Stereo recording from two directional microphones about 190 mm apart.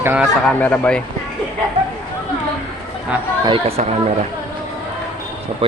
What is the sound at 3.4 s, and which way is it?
Speech, 30° right (ahead or behind).